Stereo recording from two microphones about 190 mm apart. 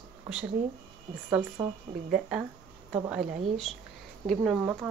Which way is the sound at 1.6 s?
10° right (ahead or behind).